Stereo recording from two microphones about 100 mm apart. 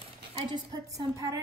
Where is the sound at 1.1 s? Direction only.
35° right (ahead or behind).